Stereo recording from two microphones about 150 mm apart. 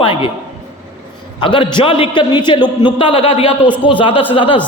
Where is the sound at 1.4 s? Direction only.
30° left (ahead or behind).